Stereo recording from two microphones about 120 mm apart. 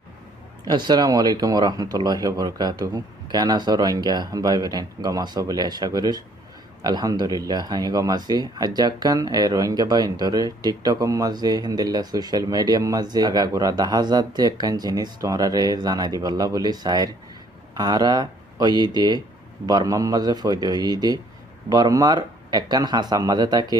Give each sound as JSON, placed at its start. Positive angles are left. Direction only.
{"t": 0.7, "sound": "speech", "side_deg": -35}